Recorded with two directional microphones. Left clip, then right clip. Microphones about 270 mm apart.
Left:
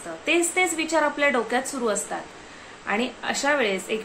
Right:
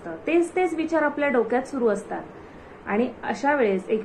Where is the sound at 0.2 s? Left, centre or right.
Centre.